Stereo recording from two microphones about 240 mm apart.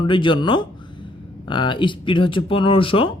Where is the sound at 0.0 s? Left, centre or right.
Centre.